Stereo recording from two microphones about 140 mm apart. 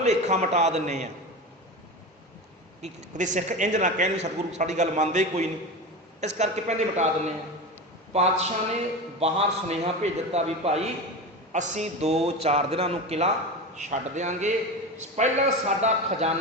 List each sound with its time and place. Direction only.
0.0 s a man's voice: 55° right (ahead or behind)
2.8 s a man's voice: 60° right (ahead or behind)
13.7 s a man's voice: 60° right (ahead or behind)